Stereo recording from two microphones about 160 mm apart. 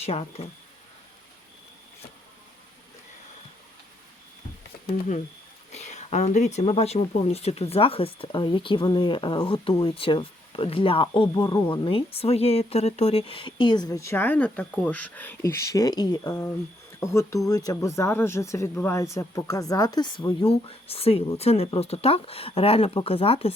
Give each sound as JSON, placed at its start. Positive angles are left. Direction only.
{"t": 0.0, "sound": "speech", "side_deg": 40}
{"t": 5.7, "sound": "speech", "side_deg": 45}
{"t": 11.3, "sound": "speech", "side_deg": 20}
{"t": 11.7, "sound": "speech", "side_deg": 30}